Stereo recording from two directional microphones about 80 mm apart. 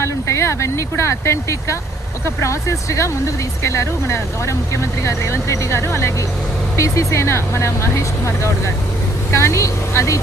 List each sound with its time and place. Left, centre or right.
0.0 s speech: left